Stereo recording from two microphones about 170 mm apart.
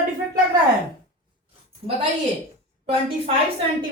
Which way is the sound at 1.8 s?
35° right (ahead or behind).